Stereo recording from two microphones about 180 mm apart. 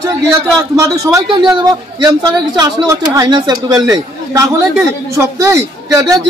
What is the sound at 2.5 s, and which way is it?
A man's voice, 20° right (ahead or behind).